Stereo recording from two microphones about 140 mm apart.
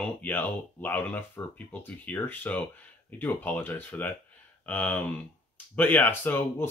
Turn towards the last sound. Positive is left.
turn(degrees=15)  # may be behind; listen again after turning